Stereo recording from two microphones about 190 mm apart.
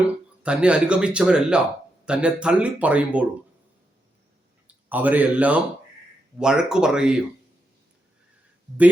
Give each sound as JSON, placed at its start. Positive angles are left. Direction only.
{"t": 0.4, "sound": "speech", "side_deg": -5}
{"t": 4.9, "sound": "speech", "side_deg": -10}